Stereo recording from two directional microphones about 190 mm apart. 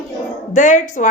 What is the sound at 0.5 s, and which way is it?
Speech, 40° left (ahead or behind).